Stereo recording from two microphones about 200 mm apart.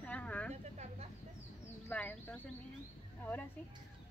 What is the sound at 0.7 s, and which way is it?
Speech, 35° right (ahead or behind).